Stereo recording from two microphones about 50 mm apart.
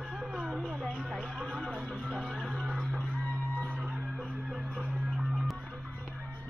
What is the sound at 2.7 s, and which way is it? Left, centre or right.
Music, centre.